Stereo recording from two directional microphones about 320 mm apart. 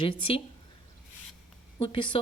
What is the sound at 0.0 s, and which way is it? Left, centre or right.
Speech, centre.